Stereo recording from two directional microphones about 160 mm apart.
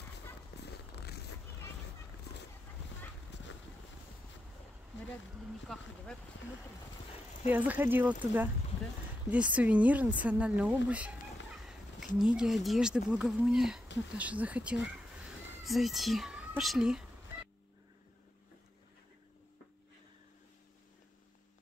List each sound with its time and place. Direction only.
0.6 s zipper: 90° left
3.3 s vehicle: 90° left
5.7 s speech: 5° left (ahead or behind)
7.4 s speech: 10° right (ahead or behind)